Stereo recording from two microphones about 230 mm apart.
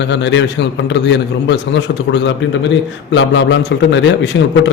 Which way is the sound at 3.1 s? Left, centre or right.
Left.